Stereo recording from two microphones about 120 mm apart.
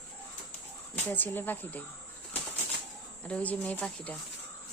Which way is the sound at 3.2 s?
10° left (ahead or behind).